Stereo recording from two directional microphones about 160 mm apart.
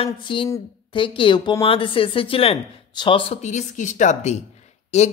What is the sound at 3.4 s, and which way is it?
Speech, 50° left (ahead or behind).